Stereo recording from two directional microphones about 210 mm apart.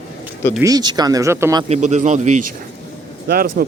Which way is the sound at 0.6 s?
15° right (ahead or behind).